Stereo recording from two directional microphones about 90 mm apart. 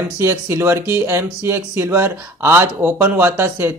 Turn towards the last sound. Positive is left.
turn(degrees=-25)  # may be behind; listen again after turning